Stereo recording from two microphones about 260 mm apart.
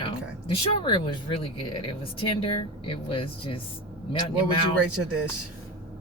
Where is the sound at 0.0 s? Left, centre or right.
Centre.